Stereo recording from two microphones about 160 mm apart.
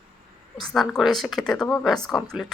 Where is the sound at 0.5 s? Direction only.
Centre (ahead or behind).